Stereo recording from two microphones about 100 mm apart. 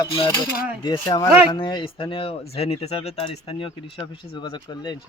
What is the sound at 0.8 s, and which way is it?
Speech, 45° left (ahead or behind).